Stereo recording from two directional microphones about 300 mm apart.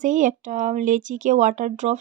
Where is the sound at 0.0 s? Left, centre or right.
Right.